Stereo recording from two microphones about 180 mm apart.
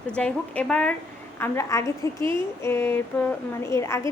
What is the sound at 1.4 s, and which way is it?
Speech, 15° left (ahead or behind).